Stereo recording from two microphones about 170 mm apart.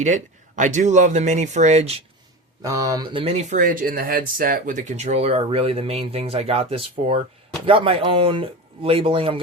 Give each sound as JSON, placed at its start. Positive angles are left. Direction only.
{"t": 0.0, "sound": "speech", "side_deg": -45}
{"t": 2.6, "sound": "speech", "side_deg": -20}
{"t": 3.6, "sound": "speech", "side_deg": -55}